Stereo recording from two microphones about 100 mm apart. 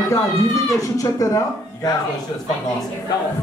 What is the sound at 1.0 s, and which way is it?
Speech, 35° left (ahead or behind).